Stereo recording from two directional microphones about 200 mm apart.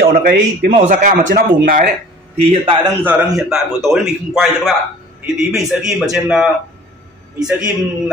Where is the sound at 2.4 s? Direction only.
25° right (ahead or behind).